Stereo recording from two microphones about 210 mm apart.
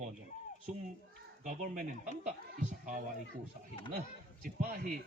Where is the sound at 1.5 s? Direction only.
40° right (ahead or behind).